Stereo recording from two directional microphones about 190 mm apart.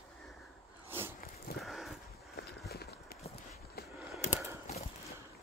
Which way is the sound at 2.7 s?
55° left (ahead or behind).